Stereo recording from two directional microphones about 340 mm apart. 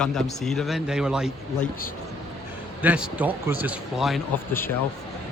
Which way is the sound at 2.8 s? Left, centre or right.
Centre.